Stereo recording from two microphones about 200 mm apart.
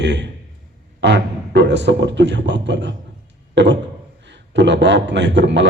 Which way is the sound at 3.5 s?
60° right (ahead or behind).